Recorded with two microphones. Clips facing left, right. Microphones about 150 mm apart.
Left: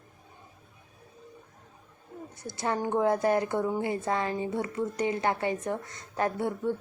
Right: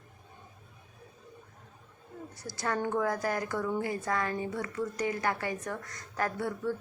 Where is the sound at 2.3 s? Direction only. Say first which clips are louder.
Left 3 dB; 20° left (ahead or behind).